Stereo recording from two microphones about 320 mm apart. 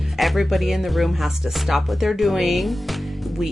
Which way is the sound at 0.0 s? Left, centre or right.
Centre.